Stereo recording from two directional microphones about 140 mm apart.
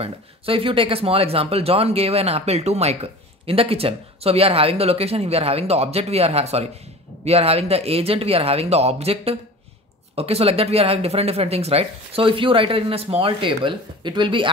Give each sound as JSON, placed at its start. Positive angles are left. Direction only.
{"t": 0.0, "sound": "speech", "side_deg": -40}